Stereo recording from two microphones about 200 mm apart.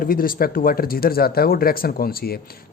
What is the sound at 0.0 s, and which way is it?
Speech, 45° left (ahead or behind).